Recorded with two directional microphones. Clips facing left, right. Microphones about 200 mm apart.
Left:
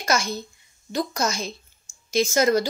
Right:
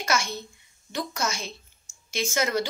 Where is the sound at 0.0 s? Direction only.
40° left (ahead or behind).